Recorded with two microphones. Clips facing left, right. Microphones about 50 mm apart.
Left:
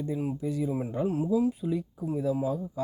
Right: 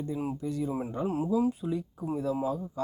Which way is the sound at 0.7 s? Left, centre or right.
Centre.